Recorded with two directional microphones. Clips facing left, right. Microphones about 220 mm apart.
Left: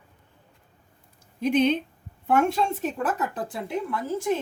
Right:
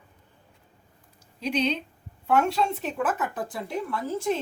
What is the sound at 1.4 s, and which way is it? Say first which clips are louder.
Speech: left 5 dB; 50° left (ahead or behind).